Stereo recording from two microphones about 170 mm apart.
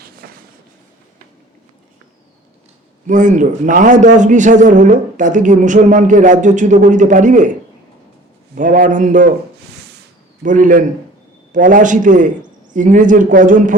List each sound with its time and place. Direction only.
0.2 s a sound: 60° right (ahead or behind)
3.1 s a man's voice: 50° right (ahead or behind)
8.5 s a man's voice: 50° right (ahead or behind)
10.4 s a man's voice: 50° right (ahead or behind)